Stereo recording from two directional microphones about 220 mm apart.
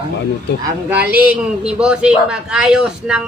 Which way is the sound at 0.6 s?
10° right (ahead or behind).